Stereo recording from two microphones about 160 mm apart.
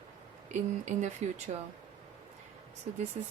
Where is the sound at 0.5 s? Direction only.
50° right (ahead or behind).